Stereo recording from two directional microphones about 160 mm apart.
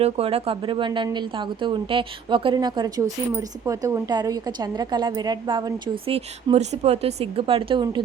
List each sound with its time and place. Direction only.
0.0 s speech: 40° right (ahead or behind)
6.1 s a woman's voice: 40° right (ahead or behind)